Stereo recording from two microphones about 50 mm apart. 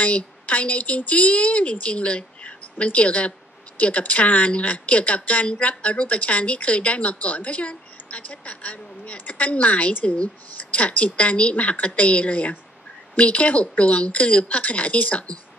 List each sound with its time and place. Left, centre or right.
0.0 s a woman's voice: left